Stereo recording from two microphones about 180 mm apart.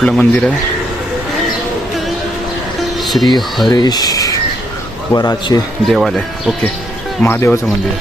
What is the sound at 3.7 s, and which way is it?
Speech, 25° left (ahead or behind).